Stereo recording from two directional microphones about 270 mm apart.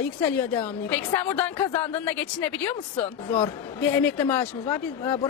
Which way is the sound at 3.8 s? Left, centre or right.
Centre.